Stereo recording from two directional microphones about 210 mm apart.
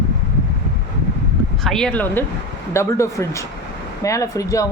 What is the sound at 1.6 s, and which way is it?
Speech, centre (ahead or behind).